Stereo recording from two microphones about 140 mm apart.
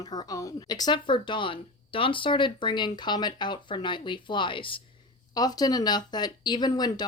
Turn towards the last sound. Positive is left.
turn(degrees=30)  # may be behind; listen again after turning